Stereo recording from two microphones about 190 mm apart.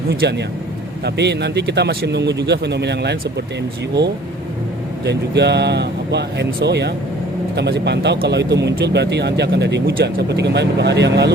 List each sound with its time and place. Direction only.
0.1 s speech: 60° right (ahead or behind)
5.0 s speech: 60° right (ahead or behind)